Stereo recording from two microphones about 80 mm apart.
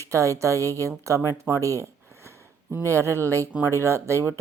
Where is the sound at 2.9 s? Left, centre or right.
Right.